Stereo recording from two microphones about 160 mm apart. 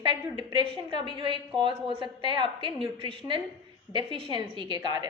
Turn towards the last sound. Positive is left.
turn(degrees=-25)  # may be behind; listen again after turning